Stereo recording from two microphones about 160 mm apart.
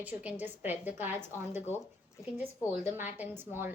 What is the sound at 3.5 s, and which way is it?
Speech, 15° right (ahead or behind).